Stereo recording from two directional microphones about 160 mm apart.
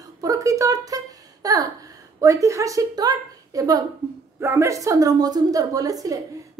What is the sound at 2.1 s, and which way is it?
A woman's voice, 20° right (ahead or behind).